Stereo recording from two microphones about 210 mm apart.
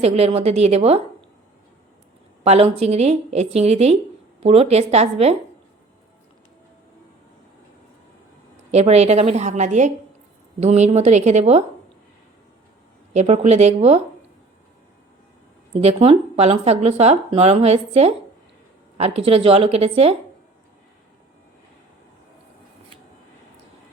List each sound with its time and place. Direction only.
0.0 s speech: 30° right (ahead or behind)
2.4 s speech: 30° right (ahead or behind)
8.7 s a woman's voice: 30° right (ahead or behind)
13.1 s a woman's voice: 30° right (ahead or behind)
15.8 s speech: 30° right (ahead or behind)